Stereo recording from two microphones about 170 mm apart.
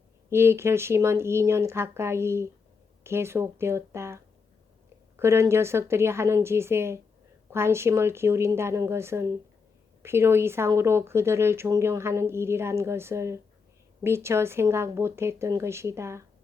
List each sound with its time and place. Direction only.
0.3 s speech: 15° right (ahead or behind)